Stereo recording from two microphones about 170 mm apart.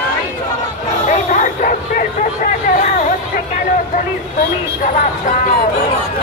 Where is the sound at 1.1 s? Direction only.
50° left (ahead or behind).